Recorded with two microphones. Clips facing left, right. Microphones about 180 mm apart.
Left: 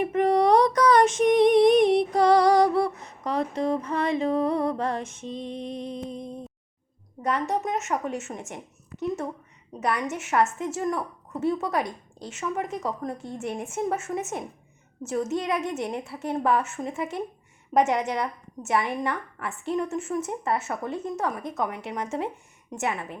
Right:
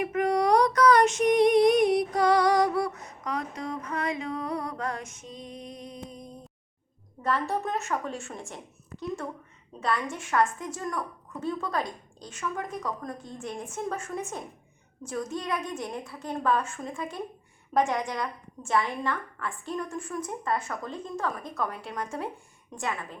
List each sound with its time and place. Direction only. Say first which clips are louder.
0.0 s female singing: left 4 dB; 30° left (ahead or behind)
7.2 s a woman's voice: left 2 dB; 20° left (ahead or behind)